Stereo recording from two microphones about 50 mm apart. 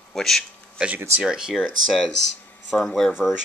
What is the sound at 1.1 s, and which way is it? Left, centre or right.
Speech, centre.